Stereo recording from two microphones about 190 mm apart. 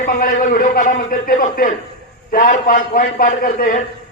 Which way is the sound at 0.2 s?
45° left (ahead or behind).